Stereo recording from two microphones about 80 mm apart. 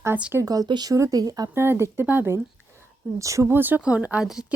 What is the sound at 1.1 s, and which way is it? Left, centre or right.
Speech, right.